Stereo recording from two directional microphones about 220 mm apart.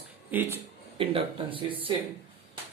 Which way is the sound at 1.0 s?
25° right (ahead or behind).